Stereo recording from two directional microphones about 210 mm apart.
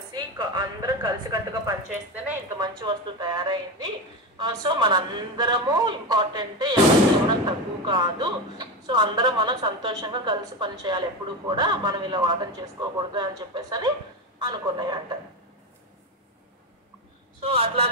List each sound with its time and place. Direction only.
0.1 s a woman's voice: 20° right (ahead or behind)
17.4 s speech: 30° right (ahead or behind)